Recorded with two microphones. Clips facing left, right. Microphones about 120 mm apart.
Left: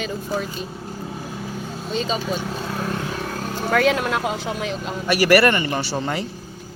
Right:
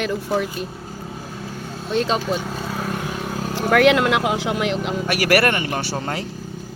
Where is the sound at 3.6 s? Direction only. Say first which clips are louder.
Right 4 dB; 70° right (ahead or behind).